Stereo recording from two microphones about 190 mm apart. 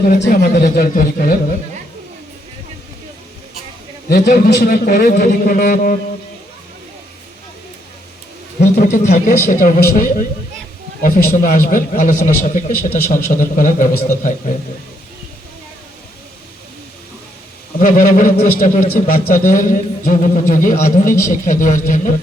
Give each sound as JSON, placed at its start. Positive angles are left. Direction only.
{"t": 0.1, "sound": "a man's voice", "side_deg": 50}
{"t": 4.1, "sound": "a man's voice", "side_deg": 55}
{"t": 8.6, "sound": "a man's voice", "side_deg": 60}
{"t": 9.0, "sound": "a man's voice", "side_deg": 40}
{"t": 17.7, "sound": "a man's voice", "side_deg": 45}